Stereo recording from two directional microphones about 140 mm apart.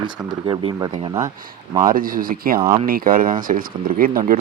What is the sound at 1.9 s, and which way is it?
Speech, 80° right.